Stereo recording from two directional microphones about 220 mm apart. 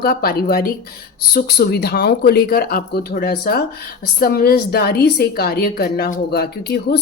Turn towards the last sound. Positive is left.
turn(degrees=45)  # may be behind; listen again after turning